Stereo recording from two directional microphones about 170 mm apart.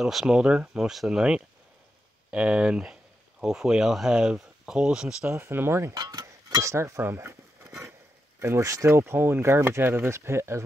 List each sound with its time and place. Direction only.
0.0 s speech: 5° right (ahead or behind)